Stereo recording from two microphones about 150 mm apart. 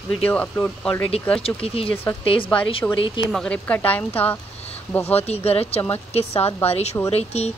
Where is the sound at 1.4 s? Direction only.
40° left (ahead or behind).